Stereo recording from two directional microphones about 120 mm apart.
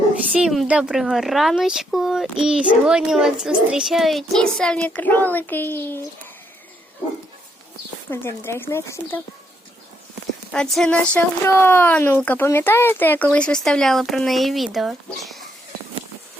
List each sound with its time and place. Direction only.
0.3 s a child's voice: 5° right (ahead or behind); by 6.1 s 20° left (ahead or behind)
8.1 s speech: 20° left (ahead or behind)
10.5 s a child's voice: 5° left (ahead or behind)
11.4 s speech: 20° left (ahead or behind); by 15.4 s centre (ahead or behind)